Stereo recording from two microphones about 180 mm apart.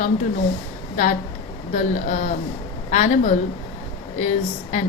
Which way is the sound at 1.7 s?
40° left (ahead or behind).